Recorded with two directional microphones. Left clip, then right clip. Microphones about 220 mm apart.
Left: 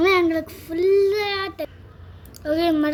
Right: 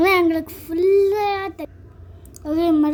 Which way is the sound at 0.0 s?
50° right (ahead or behind).